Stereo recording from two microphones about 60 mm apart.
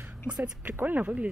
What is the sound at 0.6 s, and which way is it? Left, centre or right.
Speech, right.